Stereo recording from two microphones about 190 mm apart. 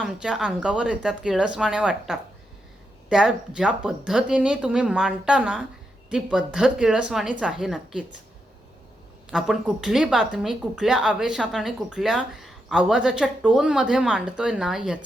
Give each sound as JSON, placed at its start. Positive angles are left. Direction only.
{"t": 0.0, "sound": "speech", "side_deg": -5}
{"t": 9.3, "sound": "speech", "side_deg": 0}